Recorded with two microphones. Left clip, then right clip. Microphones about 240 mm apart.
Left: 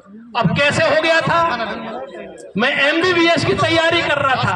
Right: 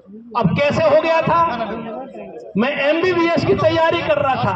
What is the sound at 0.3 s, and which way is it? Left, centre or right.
A man's voice, left.